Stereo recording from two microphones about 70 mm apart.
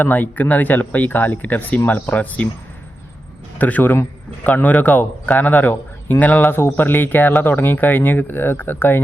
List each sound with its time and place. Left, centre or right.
0.0 s a man's voice: left
1.8 s speech: left
2.0 s a man's voice: left
3.6 s a man's voice: left